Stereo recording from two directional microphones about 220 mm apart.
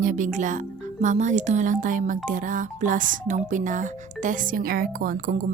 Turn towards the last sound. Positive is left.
turn(degrees=-40)  # may be behind; listen again after turning